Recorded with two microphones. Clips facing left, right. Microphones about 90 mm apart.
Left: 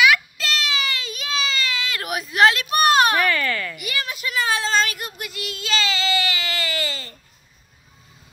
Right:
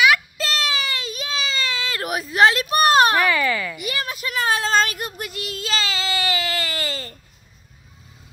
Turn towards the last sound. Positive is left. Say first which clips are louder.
# even
turn(degrees=-40)  # may be behind; listen again after turning